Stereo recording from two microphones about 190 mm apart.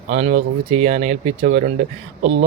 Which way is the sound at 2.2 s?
80° right.